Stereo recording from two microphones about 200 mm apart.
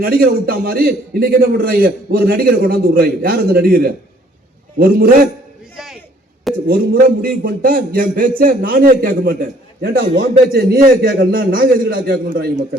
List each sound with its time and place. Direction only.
0.0 s a man's voice: 50° right (ahead or behind)
5.7 s a sound: centre (ahead or behind)
6.7 s a man's voice: 45° right (ahead or behind)